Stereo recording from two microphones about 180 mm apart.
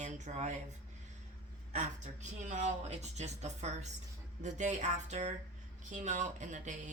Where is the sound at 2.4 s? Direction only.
40° right (ahead or behind).